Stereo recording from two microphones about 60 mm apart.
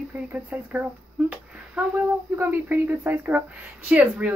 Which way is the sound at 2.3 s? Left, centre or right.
Right.